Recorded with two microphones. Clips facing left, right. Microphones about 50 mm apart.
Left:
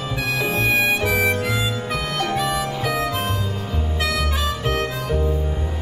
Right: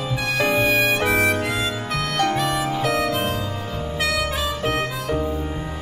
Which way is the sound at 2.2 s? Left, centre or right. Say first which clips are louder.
Right 2 dB; centre.